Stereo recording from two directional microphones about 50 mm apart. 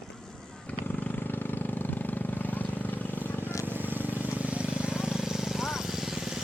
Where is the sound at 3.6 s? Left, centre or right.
Right.